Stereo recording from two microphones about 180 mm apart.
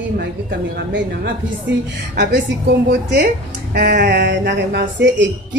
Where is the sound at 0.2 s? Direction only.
80° right.